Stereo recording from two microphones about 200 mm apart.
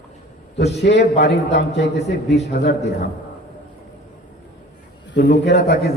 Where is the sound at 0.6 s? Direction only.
55° left (ahead or behind).